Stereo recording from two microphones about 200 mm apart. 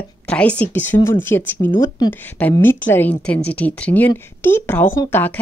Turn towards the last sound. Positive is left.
turn(degrees=10)  # may be behind; listen again after turning